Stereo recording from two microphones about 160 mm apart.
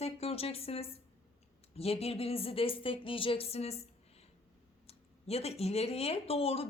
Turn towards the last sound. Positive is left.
turn(degrees=40)  # may be behind; listen again after turning